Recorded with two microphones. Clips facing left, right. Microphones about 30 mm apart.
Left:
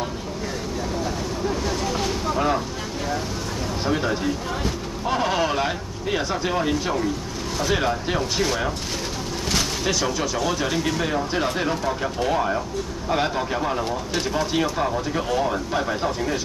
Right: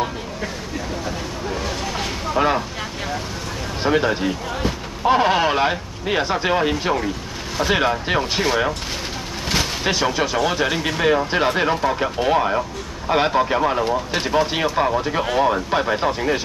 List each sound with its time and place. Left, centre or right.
2.0 s vehicle: right
3.8 s speech: right